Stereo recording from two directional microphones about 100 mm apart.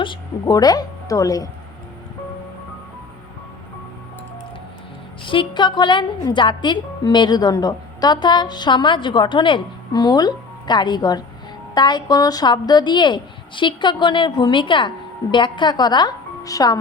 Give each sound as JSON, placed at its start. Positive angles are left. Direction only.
{"t": 0.4, "sound": "a woman's voice", "side_deg": 40}
{"t": 5.2, "sound": "speech", "side_deg": 60}